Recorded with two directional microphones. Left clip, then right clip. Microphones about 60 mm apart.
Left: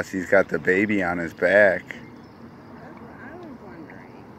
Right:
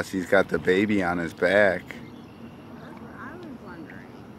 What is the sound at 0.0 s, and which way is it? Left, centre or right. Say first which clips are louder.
Speech: left 2 dB; right.